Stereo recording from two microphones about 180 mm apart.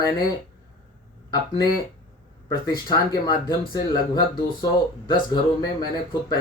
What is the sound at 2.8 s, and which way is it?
Speech, 25° left (ahead or behind).